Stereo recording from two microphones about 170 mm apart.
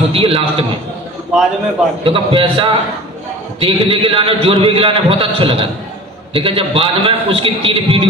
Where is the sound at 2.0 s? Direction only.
30° right (ahead or behind).